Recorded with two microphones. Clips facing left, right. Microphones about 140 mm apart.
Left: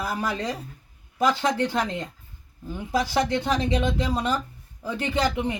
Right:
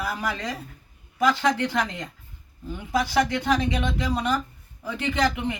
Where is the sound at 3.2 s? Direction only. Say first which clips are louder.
Right 2 dB; 25° left (ahead or behind).